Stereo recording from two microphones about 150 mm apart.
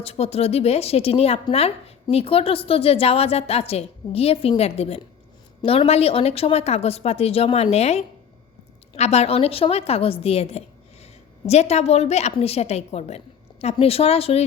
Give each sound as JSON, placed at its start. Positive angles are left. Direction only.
{"t": 0.0, "sound": "a woman's voice", "side_deg": 40}